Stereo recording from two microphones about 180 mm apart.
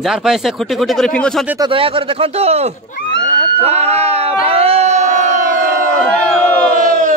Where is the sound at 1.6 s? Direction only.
30° right (ahead or behind).